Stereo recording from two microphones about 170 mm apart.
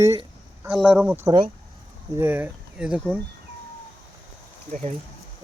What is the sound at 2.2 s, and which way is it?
Speech, 10° right (ahead or behind).